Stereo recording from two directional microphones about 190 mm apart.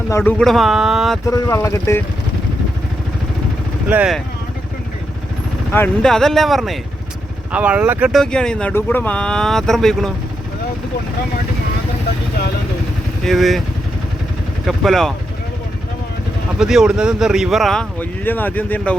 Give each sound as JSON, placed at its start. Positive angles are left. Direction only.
{"t": 0.1, "sound": "speech", "side_deg": 10}
{"t": 1.3, "sound": "speech", "side_deg": 15}
{"t": 3.8, "sound": "speech", "side_deg": -5}
{"t": 5.7, "sound": "speech", "side_deg": 5}
{"t": 13.2, "sound": "speech", "side_deg": 0}
{"t": 14.7, "sound": "speech", "side_deg": 0}
{"t": 16.6, "sound": "speech", "side_deg": 0}